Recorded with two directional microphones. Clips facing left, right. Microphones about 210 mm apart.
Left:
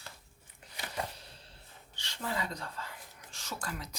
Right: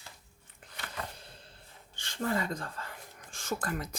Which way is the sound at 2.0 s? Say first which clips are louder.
Right 5 dB; 50° right (ahead or behind).